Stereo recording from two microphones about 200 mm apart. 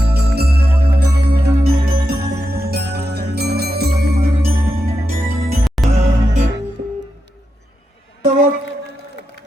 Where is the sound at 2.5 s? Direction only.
50° right (ahead or behind).